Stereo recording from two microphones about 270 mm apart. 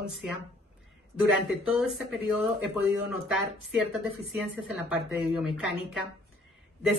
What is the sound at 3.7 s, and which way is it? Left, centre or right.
Speech, centre.